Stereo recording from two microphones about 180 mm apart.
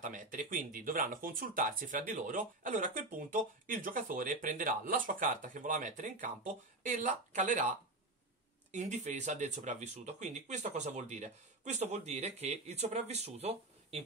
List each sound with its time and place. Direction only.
0.0 s speech: 45° right (ahead or behind)
8.7 s speech: 40° right (ahead or behind)